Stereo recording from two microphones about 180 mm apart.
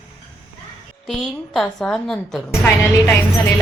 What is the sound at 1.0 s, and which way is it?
A woman's voice, centre (ahead or behind).